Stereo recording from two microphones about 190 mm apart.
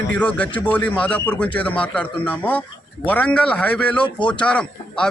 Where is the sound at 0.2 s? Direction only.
5° left (ahead or behind).